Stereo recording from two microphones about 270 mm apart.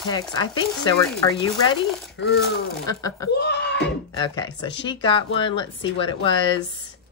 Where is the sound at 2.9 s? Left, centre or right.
Centre.